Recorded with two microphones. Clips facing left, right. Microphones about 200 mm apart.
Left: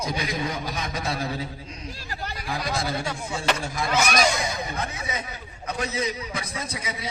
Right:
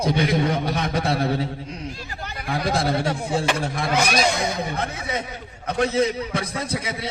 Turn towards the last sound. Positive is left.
turn(degrees=-65)  # may be behind; listen again after turning